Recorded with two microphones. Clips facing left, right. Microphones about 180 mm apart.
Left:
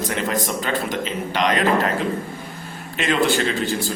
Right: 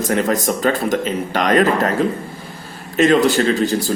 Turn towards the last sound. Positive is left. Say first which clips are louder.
# right 6 dB
turn(degrees=-40)  # may be behind; listen again after turning